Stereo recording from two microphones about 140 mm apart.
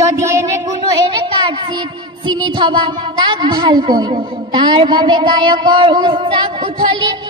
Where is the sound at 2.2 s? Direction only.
30° right (ahead or behind).